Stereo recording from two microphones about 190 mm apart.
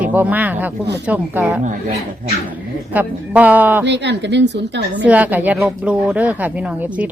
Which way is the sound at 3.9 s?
65° right (ahead or behind).